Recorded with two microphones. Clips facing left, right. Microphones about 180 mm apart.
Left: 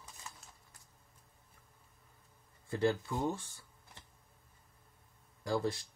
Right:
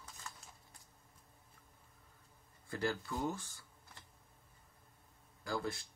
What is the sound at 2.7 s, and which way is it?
Speech, 25° left (ahead or behind).